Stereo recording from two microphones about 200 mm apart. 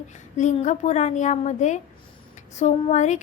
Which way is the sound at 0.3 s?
35° left (ahead or behind).